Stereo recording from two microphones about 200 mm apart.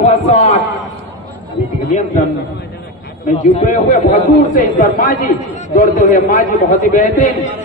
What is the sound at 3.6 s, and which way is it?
A man's voice, 40° left (ahead or behind).